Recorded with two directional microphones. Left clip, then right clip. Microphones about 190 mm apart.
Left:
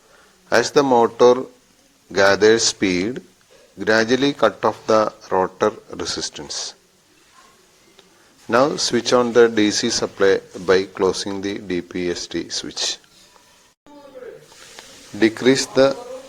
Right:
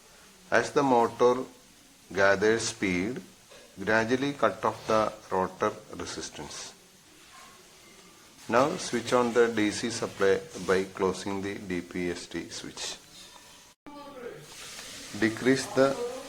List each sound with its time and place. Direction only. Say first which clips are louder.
0.5 s speech: left 8 dB; 30° left (ahead or behind)
8.4 s speech: left 8 dB; 30° left (ahead or behind)
15.2 s speech: left 10 dB; 30° left (ahead or behind)